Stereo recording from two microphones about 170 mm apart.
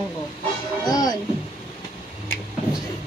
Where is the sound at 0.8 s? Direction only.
20° left (ahead or behind).